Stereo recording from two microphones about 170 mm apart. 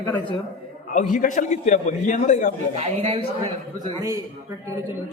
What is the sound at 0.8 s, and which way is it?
A man's voice, 50° left (ahead or behind).